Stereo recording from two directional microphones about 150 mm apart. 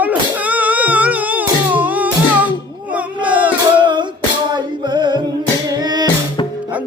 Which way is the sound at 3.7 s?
30° right (ahead or behind).